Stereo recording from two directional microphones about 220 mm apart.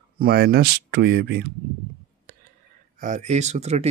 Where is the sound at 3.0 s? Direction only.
35° right (ahead or behind).